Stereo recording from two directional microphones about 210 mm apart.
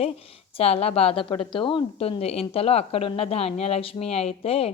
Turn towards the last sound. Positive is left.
turn(degrees=30)  # may be behind; listen again after turning